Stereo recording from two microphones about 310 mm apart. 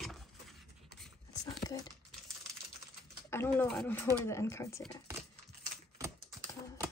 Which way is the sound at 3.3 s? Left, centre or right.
Centre.